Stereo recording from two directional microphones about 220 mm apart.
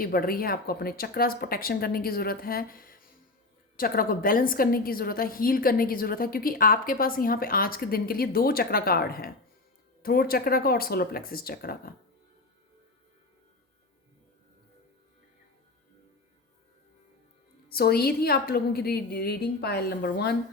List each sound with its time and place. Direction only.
0.0 s a woman's voice: 40° left (ahead or behind)
17.7 s speech: 45° left (ahead or behind)